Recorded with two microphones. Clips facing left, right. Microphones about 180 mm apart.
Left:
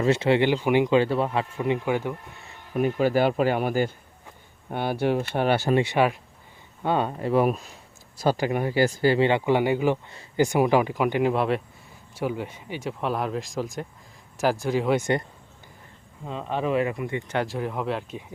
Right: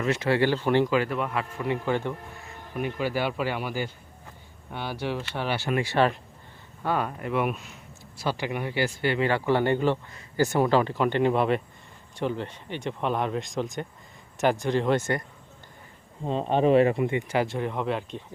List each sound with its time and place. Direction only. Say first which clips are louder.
0.0 s speech: left 3 dB; 25° left (ahead or behind)
0.9 s speech: left 4 dB; 30° left (ahead or behind); by 2.1 s 10° left (ahead or behind)
2.7 s speech: left 6 dB; 45° left (ahead or behind)
5.7 s speech: left 2 dB; 20° left (ahead or behind)
6.8 s speech: left 3 dB; 25° left (ahead or behind)
9.2 s speech: left 2 dB; 15° left (ahead or behind)
10.1 s speech: left 4 dB; 25° left (ahead or behind)
10.4 s speech: left 2 dB; 15° left (ahead or behind)
16.2 s speech: right 5 dB; 30° right (ahead or behind)
17.1 s speech: right 2 dB; 15° right (ahead or behind)
17.3 s speech: right 1 dB; centre (ahead or behind)